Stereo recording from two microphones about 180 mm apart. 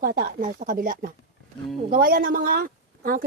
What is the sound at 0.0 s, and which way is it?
A woman's voice, 55° right (ahead or behind).